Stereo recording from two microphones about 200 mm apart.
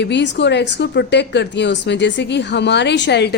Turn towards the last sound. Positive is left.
turn(degrees=60)  # may be behind; listen again after turning